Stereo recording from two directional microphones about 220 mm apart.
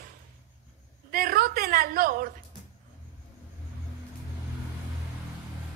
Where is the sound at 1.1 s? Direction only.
40° right (ahead or behind).